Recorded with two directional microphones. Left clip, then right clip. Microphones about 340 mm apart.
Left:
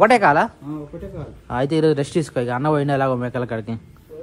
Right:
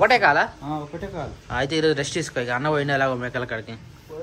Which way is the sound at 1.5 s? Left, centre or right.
Centre.